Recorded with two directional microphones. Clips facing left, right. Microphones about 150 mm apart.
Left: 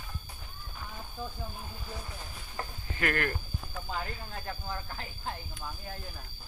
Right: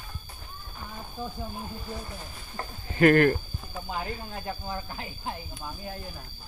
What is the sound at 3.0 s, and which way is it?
Speech, 35° right (ahead or behind).